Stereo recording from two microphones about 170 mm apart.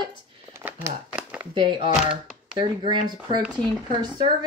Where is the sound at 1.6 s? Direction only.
30° right (ahead or behind).